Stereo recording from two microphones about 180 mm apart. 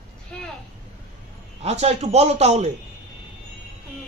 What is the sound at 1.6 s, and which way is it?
Speech, 35° right (ahead or behind).